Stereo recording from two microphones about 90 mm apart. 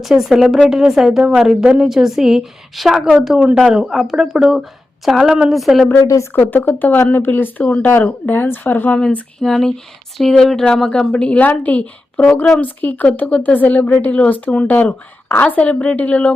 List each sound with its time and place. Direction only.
0.0 s a woman's voice: centre (ahead or behind)
6.0 s speech: 40° left (ahead or behind)
6.3 s speech: 20° left (ahead or behind)
9.0 s speech: 5° left (ahead or behind)